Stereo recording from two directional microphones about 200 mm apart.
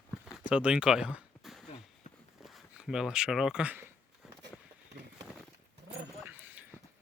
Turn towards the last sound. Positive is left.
turn(degrees=-10)  # may be behind; listen again after turning